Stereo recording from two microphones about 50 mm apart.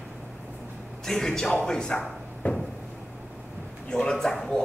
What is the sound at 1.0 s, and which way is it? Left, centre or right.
Speech, centre.